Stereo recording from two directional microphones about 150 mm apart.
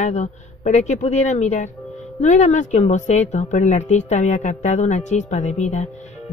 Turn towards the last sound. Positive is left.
turn(degrees=50)  # may be behind; listen again after turning